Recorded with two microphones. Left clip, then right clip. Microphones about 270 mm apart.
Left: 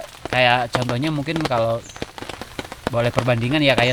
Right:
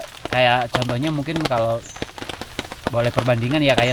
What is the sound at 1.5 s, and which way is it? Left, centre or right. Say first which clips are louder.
Speech: even; left.